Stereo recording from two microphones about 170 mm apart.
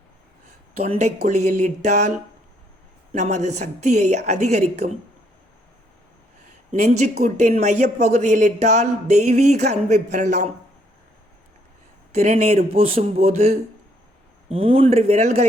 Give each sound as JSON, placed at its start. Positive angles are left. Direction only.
{"t": 0.8, "sound": "a man's voice", "side_deg": -40}
{"t": 6.7, "sound": "a man's voice", "side_deg": -40}
{"t": 12.1, "sound": "speech", "side_deg": -40}